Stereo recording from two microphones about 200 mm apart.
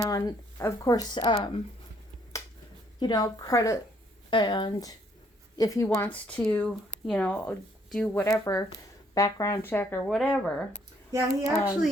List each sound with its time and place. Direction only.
0.0 s speech: 15° left (ahead or behind)
2.3 s finger snapping: 15° left (ahead or behind)
3.0 s speech: 20° left (ahead or behind); by 10.4 s centre (ahead or behind)
11.1 s a child's voice: 15° right (ahead or behind)